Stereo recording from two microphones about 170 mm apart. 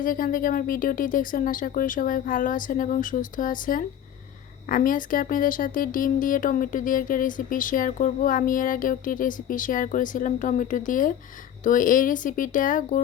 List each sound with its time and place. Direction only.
0.0 s speech: 55° left (ahead or behind)